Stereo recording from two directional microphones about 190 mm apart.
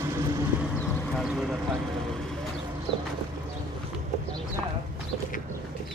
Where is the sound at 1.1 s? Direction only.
Centre (ahead or behind).